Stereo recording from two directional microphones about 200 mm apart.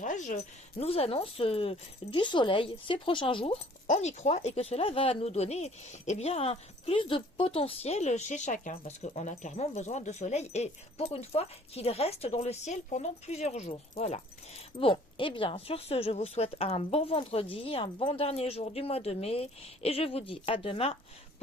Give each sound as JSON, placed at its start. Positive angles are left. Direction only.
{"t": 0.0, "sound": "speech", "side_deg": 40}